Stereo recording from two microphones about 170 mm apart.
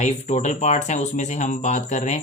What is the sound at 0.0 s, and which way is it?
Speech, 45° left (ahead or behind).